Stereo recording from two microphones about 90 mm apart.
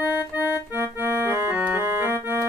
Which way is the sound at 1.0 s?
20° right (ahead or behind).